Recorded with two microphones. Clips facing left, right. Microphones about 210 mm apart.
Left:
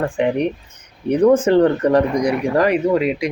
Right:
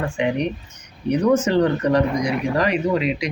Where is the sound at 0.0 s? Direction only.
55° left (ahead or behind).